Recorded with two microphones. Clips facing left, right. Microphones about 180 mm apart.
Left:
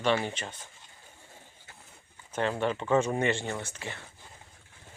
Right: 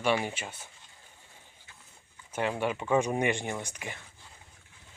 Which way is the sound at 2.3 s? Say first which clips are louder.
Left 1 dB; 10° right (ahead or behind).